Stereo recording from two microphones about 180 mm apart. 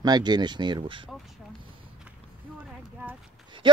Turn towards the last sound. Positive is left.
turn(degrees=-25)  # may be behind; listen again after turning